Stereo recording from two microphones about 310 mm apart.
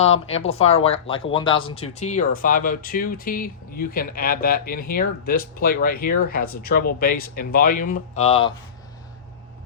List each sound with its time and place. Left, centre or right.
0.3 s speech: centre